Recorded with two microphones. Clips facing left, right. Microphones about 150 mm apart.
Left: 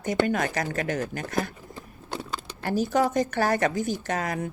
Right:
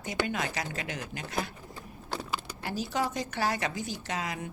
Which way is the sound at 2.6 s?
50° left (ahead or behind).